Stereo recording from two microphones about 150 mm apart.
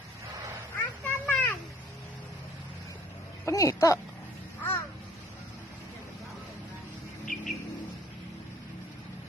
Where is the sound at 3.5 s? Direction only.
20° left (ahead or behind).